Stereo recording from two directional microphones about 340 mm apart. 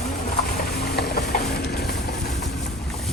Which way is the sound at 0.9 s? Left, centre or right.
Left.